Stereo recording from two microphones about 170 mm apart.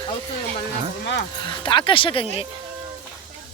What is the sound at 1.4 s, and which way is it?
Speech, 30° left (ahead or behind).